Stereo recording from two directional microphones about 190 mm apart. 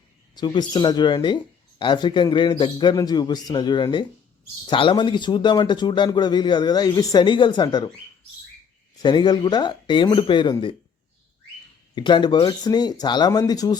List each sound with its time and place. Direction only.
0.3 s speech: 20° left (ahead or behind)
9.0 s speech: 25° left (ahead or behind)
11.9 s speech: 25° left (ahead or behind)